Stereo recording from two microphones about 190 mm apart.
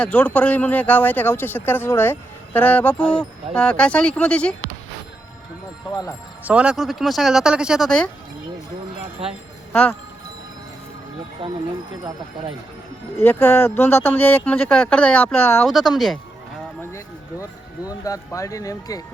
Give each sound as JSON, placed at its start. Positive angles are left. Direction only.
{"t": 0.0, "sound": "speech", "side_deg": 5}
{"t": 6.4, "sound": "speech", "side_deg": -5}
{"t": 11.4, "sound": "speech", "side_deg": -30}
{"t": 13.1, "sound": "speech", "side_deg": 10}
{"t": 15.6, "sound": "speech", "side_deg": 0}
{"t": 17.8, "sound": "speech", "side_deg": 20}